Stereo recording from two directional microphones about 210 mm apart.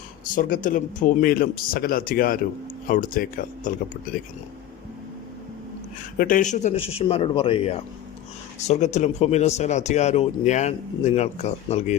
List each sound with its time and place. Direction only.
0.3 s speech: 40° left (ahead or behind)
6.1 s speech: 40° left (ahead or behind)